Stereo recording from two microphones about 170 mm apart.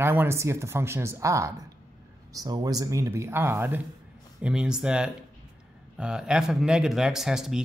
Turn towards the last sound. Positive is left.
turn(degrees=-5)  # may be behind; listen again after turning